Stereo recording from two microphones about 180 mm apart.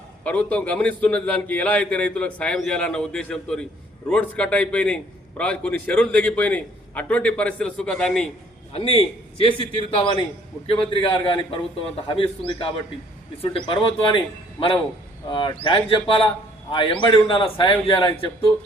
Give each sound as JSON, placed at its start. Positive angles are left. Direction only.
{"t": 0.3, "sound": "a man's voice", "side_deg": 10}
{"t": 8.7, "sound": "a man's voice", "side_deg": 30}